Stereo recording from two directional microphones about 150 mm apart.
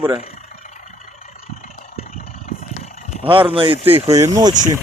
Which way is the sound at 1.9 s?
45° left (ahead or behind).